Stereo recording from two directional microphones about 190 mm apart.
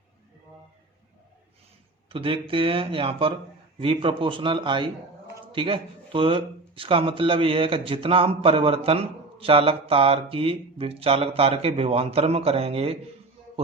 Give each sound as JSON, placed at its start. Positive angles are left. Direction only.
{"t": 2.0, "sound": "speech", "side_deg": -30}